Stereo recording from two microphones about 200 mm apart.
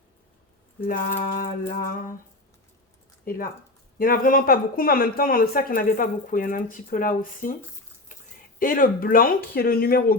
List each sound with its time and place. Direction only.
0.9 s speech: 45° left (ahead or behind)
3.2 s speech: 45° left (ahead or behind)
8.5 s speech: 45° left (ahead or behind)